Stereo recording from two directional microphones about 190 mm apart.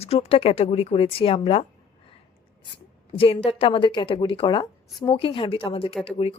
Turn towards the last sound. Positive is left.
turn(degrees=30)  # may be behind; listen again after turning